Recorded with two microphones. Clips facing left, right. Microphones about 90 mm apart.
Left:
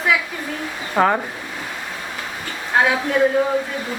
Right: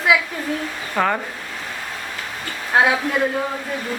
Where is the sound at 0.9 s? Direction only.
15° left (ahead or behind).